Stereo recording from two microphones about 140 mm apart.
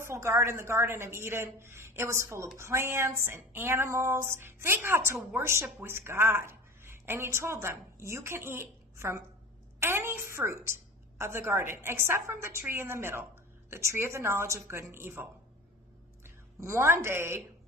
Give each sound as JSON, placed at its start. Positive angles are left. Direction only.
{"t": 0.0, "sound": "a woman's voice", "side_deg": -20}